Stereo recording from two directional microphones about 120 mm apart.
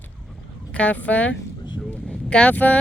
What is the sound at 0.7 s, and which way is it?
Speech, 10° left (ahead or behind).